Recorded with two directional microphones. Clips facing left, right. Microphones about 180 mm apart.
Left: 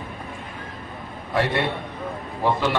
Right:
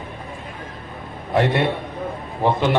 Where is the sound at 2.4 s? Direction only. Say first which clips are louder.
Right 3 dB; 20° right (ahead or behind).